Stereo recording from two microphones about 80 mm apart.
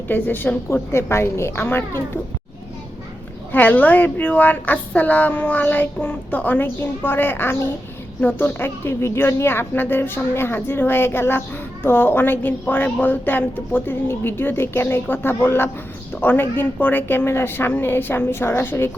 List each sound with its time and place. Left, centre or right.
0.1 s a woman's voice: left
3.5 s a woman's voice: left